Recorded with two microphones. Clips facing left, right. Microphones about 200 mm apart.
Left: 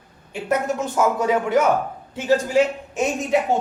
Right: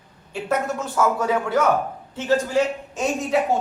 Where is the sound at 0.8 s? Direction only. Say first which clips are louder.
Left 1 dB; 20° left (ahead or behind).